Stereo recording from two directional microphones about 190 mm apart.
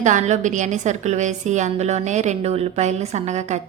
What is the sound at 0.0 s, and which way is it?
A woman's voice, 40° right (ahead or behind).